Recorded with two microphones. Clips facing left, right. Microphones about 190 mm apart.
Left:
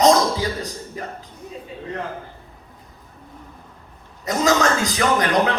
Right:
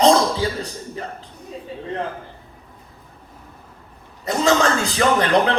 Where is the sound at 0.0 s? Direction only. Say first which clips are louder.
Right 1 dB; 30° right (ahead or behind).